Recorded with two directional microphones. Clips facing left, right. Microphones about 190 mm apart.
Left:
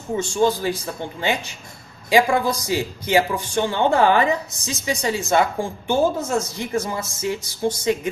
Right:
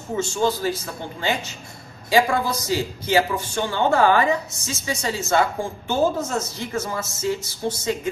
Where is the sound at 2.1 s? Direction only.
15° left (ahead or behind).